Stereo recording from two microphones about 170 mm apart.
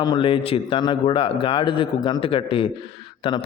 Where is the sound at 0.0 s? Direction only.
25° left (ahead or behind).